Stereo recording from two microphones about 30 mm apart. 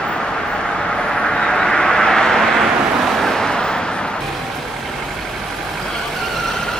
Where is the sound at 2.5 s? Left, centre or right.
Centre; by 4.1 s left.